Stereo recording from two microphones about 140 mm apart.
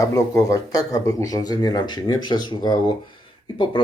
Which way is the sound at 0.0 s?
25° left (ahead or behind).